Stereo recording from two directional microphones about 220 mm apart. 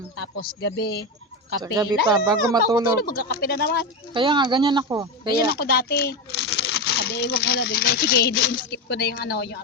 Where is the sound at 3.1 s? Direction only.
45° left (ahead or behind).